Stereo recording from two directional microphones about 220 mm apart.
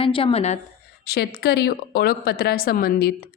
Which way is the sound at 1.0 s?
45° left (ahead or behind).